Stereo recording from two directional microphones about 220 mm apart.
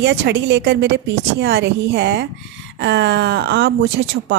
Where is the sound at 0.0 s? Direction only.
50° right (ahead or behind).